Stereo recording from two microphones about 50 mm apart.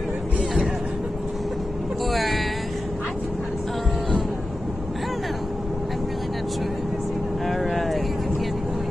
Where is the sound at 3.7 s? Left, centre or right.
Centre.